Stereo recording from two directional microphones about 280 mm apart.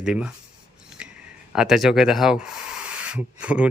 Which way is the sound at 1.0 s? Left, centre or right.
Centre.